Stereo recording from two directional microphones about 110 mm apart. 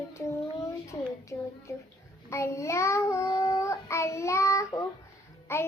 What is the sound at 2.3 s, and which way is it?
Child singing, 25° left (ahead or behind).